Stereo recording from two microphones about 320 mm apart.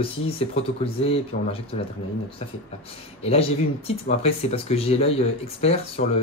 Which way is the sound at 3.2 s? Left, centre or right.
Centre.